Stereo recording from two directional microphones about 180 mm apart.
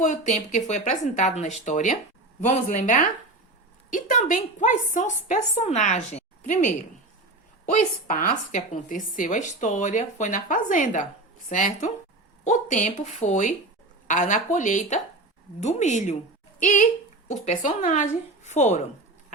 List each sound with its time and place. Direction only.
0.0 s a woman's voice: 40° left (ahead or behind)